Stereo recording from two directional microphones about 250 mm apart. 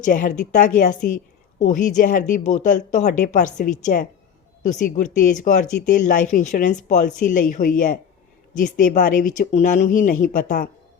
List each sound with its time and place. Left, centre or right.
0.0 s a woman's voice: left
8.5 s speech: left